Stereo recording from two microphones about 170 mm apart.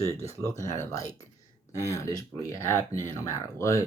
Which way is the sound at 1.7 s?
20° left (ahead or behind).